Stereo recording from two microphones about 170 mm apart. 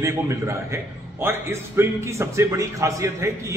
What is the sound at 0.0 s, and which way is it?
Speech, 15° right (ahead or behind).